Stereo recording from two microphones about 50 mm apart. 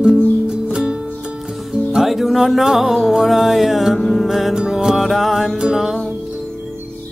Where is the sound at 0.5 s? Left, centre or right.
Centre.